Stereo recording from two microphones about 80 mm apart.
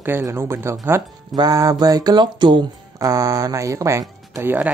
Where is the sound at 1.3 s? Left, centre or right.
Right.